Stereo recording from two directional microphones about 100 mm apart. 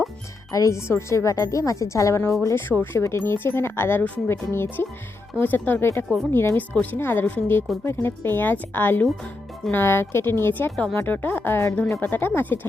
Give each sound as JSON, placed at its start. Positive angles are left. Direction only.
{"t": 0.5, "sound": "a woman's voice", "side_deg": 30}